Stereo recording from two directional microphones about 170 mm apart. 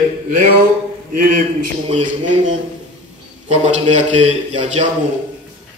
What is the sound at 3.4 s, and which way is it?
Speech, 40° right (ahead or behind).